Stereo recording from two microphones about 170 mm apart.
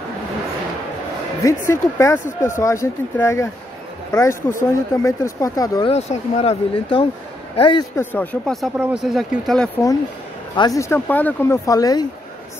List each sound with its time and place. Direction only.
1.4 s speech: 15° left (ahead or behind)
5.9 s speech: 40° left (ahead or behind)
7.9 s speech: 10° left (ahead or behind)
8.7 s speech: 5° right (ahead or behind)
10.5 s speech: 25° left (ahead or behind)